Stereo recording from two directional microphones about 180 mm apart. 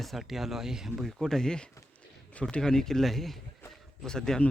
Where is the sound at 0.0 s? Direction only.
Centre (ahead or behind).